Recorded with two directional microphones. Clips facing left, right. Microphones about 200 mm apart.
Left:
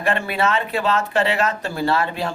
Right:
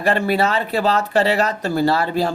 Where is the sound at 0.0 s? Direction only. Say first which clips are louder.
Right 3 dB; 35° right (ahead or behind).